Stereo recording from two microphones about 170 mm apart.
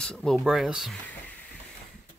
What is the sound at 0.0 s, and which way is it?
Speech, 5° left (ahead or behind).